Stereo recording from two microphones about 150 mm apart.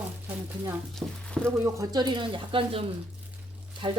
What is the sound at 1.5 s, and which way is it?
Speech, 20° right (ahead or behind).